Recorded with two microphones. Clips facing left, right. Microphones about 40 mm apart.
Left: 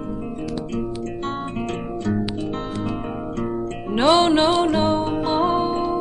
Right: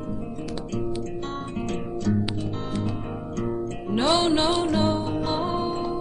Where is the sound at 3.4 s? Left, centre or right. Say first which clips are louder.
Left 1 dB; left.